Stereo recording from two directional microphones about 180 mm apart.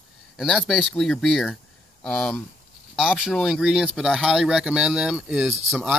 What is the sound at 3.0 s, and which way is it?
Speech, 5° right (ahead or behind).